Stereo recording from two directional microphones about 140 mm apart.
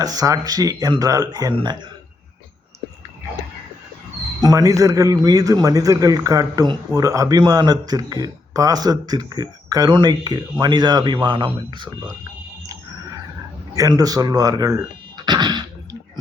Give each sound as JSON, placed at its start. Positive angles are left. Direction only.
{"t": 0.0, "sound": "a man's voice", "side_deg": -25}
{"t": 4.4, "sound": "a man's voice", "side_deg": -25}
{"t": 13.7, "sound": "speech", "side_deg": -25}